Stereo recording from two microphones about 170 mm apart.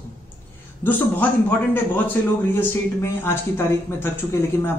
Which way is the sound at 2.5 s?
15° left (ahead or behind).